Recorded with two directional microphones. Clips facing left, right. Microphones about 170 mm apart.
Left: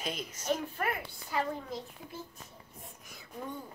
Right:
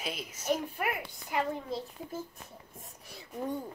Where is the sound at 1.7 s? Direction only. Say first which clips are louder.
Right 4 dB; 30° right (ahead or behind).